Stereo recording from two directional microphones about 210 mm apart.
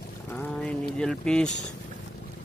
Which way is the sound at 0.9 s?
5° left (ahead or behind).